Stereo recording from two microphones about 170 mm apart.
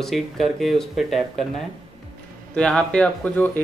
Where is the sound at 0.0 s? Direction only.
Centre (ahead or behind).